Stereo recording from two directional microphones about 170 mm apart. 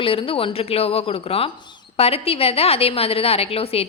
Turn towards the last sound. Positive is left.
turn(degrees=35)  # may be behind; listen again after turning